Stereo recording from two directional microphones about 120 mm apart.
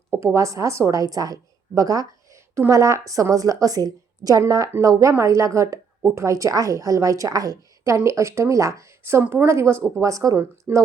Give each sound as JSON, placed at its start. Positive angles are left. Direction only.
{"t": 0.1, "sound": "a woman's voice", "side_deg": -25}